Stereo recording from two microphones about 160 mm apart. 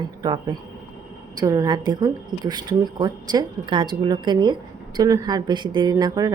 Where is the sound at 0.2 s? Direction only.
25° right (ahead or behind).